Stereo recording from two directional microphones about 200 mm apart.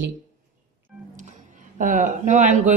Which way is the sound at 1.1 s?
40° right (ahead or behind).